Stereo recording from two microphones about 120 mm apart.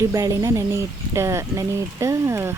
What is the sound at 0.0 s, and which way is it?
Speech, 25° right (ahead or behind).